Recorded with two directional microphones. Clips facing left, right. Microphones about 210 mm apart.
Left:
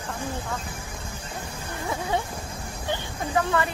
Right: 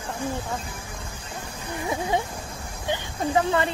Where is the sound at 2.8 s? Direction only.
20° right (ahead or behind).